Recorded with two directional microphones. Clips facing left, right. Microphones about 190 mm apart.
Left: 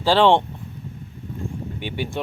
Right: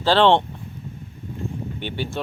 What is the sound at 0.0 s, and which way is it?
Speech, 10° left (ahead or behind).